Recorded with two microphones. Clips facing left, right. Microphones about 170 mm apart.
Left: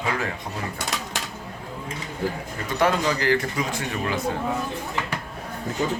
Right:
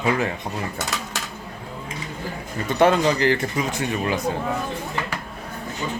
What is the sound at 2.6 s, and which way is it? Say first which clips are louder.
Speech: right 5 dB; 25° right (ahead or behind).